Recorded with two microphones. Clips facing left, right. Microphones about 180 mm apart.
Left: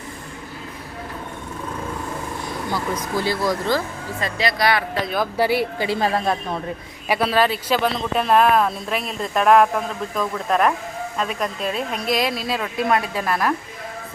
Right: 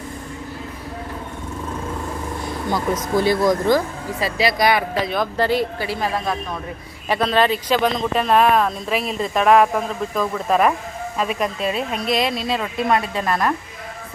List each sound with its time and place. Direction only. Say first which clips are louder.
2.7 s speech: right 5 dB; 20° right (ahead or behind)
5.0 s speech: even; 5° left (ahead or behind)
5.9 s speech: left 2 dB; 25° left (ahead or behind)
7.1 s speech: right 1 dB; 5° left (ahead or behind)